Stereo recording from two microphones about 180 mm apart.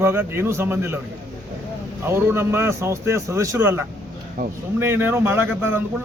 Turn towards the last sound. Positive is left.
turn(degrees=-10)  # may be behind; listen again after turning